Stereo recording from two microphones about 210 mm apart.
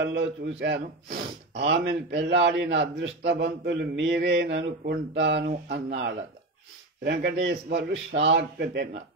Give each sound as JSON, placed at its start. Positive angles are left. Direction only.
{"t": 0.0, "sound": "a man's voice", "side_deg": -55}